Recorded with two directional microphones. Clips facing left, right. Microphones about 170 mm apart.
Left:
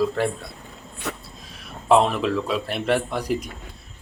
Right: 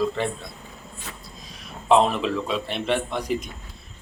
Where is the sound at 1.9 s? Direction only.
5° left (ahead or behind).